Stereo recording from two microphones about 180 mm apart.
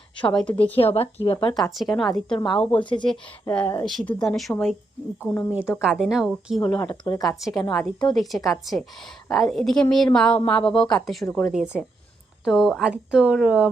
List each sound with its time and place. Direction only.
0.2 s speech: 25° left (ahead or behind)
1.7 s a woman's voice: centre (ahead or behind)
2.8 s speech: 25° left (ahead or behind)
3.5 s a woman's voice: 5° left (ahead or behind)
5.3 s speech: 15° left (ahead or behind)
5.8 s a woman's voice: 5° right (ahead or behind)
6.7 s speech: 10° left (ahead or behind)
7.0 s speech: 20° left (ahead or behind)
7.3 s a woman's voice: centre (ahead or behind)
11.5 s a woman's voice: 5° right (ahead or behind)